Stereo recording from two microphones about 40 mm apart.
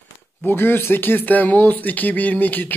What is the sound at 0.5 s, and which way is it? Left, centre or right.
Speech, left.